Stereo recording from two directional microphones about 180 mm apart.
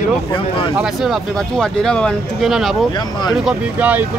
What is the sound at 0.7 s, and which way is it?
Speech, 5° right (ahead or behind).